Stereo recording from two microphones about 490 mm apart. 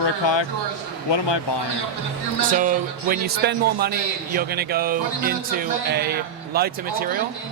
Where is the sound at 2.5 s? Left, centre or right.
Centre.